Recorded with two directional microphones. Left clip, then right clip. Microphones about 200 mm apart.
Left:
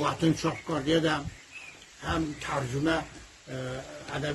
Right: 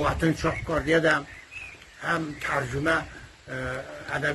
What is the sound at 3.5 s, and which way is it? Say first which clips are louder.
Speech: right 5 dB; 15° left (ahead or behind).